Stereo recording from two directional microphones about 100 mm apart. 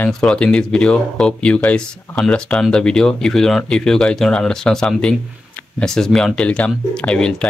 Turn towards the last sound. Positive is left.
turn(degrees=10)  # may be behind; listen again after turning